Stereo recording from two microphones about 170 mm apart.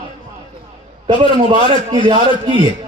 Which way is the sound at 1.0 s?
25° right (ahead or behind).